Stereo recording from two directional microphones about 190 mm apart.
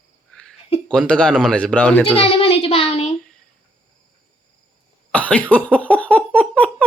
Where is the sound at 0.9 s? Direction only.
5° left (ahead or behind).